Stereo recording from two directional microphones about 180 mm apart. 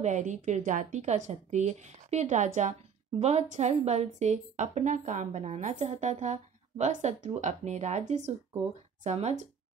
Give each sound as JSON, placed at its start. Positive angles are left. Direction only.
{"t": 0.0, "sound": "a woman's voice", "side_deg": -40}
{"t": 9.0, "sound": "a woman's voice", "side_deg": -40}